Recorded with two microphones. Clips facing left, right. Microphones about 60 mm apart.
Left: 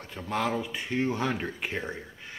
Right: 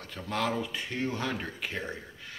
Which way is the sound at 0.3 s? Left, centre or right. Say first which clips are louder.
Left 2 dB; centre.